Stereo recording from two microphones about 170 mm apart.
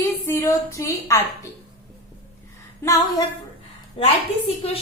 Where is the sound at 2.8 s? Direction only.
20° left (ahead or behind).